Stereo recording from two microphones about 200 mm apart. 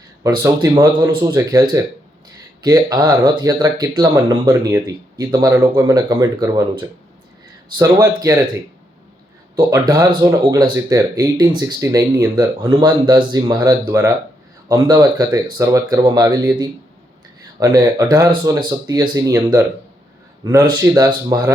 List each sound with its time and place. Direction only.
0.2 s speech: 15° right (ahead or behind)
7.8 s speech: 15° right (ahead or behind)
9.6 s speech: 20° right (ahead or behind)